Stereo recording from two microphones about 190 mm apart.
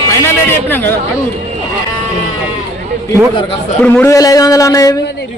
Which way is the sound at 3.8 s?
10° left (ahead or behind).